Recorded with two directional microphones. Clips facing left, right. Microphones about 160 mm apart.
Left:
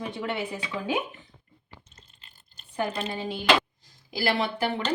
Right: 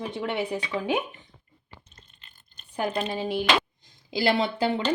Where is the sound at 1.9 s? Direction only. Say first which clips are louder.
Even; 30° left (ahead or behind).